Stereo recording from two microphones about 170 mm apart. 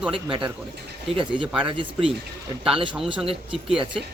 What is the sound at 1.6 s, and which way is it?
Speech, 30° right (ahead or behind).